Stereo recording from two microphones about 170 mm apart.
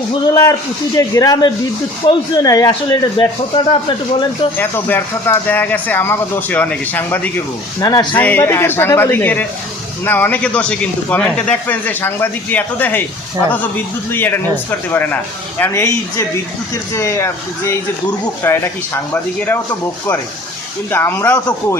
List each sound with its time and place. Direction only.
0.9 s a man's voice: 20° left (ahead or behind)
4.5 s speech: 10° left (ahead or behind)
20.9 s speech: 15° left (ahead or behind)